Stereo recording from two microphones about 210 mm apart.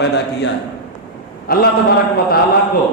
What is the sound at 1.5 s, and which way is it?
Speech, 45° left (ahead or behind).